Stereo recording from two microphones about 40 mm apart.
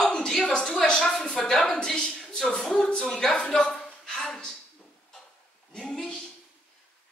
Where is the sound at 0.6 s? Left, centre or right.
Centre.